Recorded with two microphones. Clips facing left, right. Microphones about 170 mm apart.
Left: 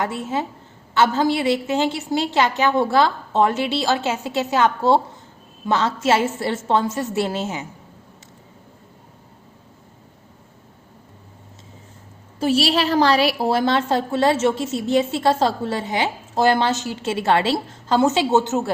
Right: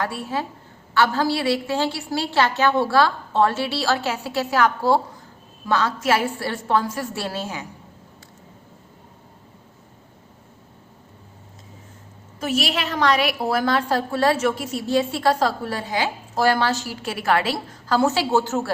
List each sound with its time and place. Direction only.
0.0 s a woman's voice: 20° left (ahead or behind)
12.4 s a woman's voice: 30° left (ahead or behind)